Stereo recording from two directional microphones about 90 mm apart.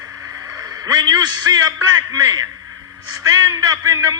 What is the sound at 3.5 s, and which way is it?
Speech, 45° right (ahead or behind).